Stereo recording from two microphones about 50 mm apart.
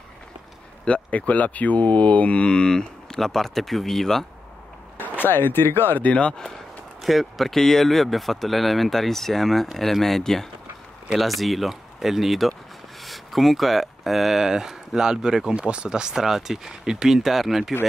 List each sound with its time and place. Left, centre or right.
0.8 s mantra: left; by 4.3 s centre
4.9 s speech: left
6.0 s mantra: left
7.0 s speech: centre